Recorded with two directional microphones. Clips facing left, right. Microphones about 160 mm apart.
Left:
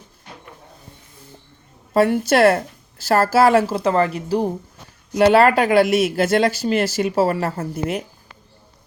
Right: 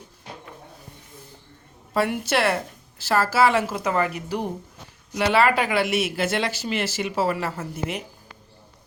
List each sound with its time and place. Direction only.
1.9 s a woman's voice: 40° left (ahead or behind)
5.1 s speech: 45° left (ahead or behind)